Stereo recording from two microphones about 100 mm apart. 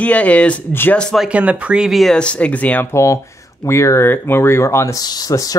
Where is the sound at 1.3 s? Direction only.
15° right (ahead or behind).